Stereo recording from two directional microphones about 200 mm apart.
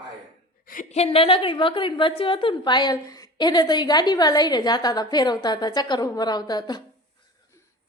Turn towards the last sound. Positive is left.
turn(degrees=20)  # may be behind; listen again after turning